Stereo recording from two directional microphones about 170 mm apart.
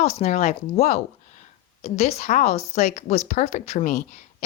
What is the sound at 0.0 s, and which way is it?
A woman's voice, 40° left (ahead or behind).